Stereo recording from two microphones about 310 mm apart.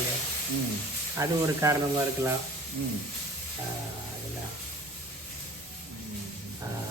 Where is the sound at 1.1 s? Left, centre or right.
Centre.